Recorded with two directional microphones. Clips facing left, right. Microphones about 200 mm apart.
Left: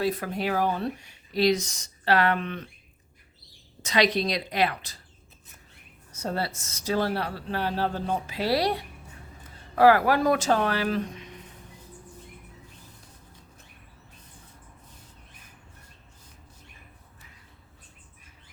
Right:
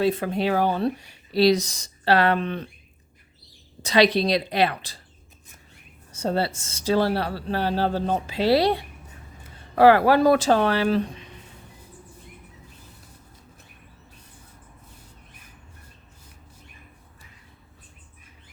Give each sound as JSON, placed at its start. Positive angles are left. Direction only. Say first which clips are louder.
{"t": 0.0, "sound": "speech", "louder": "right 5 dB", "side_deg": -25}
{"t": 3.8, "sound": "speech", "louder": "right 5 dB", "side_deg": -30}
{"t": 6.1, "sound": "speech", "louder": "right 6 dB", "side_deg": -30}